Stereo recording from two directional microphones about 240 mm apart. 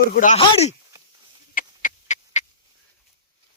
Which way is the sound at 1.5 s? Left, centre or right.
Left.